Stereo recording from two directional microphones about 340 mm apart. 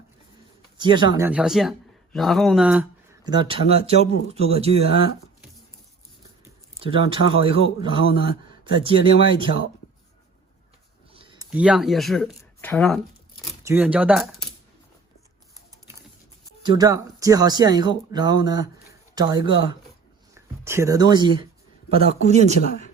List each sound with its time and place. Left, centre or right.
0.8 s speech: centre
3.2 s speech: centre
6.8 s speech: centre
11.1 s a sound: centre
11.5 s speech: centre
16.6 s speech: centre